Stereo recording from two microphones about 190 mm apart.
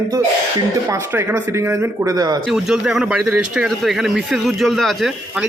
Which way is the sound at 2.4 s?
Centre (ahead or behind).